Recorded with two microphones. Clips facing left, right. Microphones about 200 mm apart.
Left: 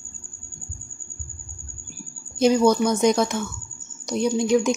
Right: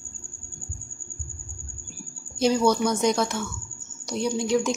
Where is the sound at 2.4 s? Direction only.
15° left (ahead or behind).